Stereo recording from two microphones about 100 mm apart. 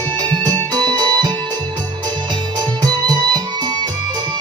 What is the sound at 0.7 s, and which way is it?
Music, 45° right (ahead or behind).